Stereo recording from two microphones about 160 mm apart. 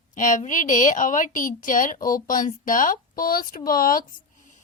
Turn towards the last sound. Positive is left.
turn(degrees=65)  # may be behind; listen again after turning